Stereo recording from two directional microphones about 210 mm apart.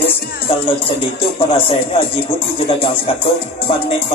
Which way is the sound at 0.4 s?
25° left (ahead or behind).